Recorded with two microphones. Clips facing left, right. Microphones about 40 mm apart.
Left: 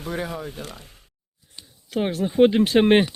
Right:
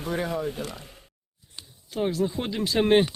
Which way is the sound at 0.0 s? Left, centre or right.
Centre.